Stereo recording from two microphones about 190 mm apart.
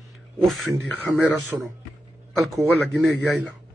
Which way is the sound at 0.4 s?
Centre (ahead or behind).